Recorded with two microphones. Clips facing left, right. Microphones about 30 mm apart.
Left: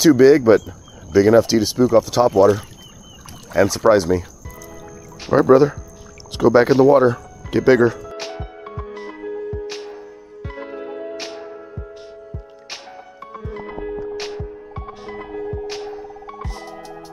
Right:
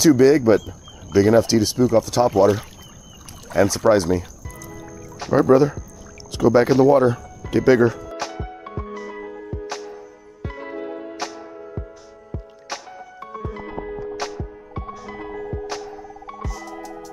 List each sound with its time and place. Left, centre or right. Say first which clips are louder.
0.0 s speech: left 3 dB; centre
2.3 s speech: left 2 dB; centre
5.2 s speech: left 2 dB; centre
8.2 s music: right 2 dB; left
8.9 s music: even; left
9.5 s music: left 3 dB; centre
10.9 s music: left 1 dB; centre
13.7 s music: left 5 dB; centre
15.8 s music: left 4 dB; left